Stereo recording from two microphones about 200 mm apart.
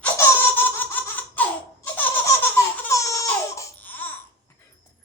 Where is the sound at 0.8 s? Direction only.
10° left (ahead or behind).